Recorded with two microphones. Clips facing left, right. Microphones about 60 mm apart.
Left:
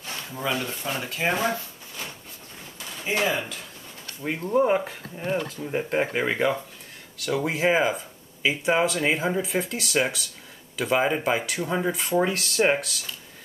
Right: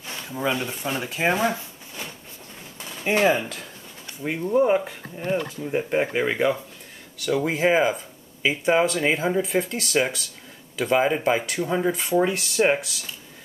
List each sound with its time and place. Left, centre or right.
0.1 s speech: centre
3.2 s speech: right
4.2 s speech: centre